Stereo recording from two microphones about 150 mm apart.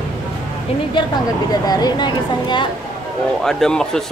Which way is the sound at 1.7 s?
25° left (ahead or behind).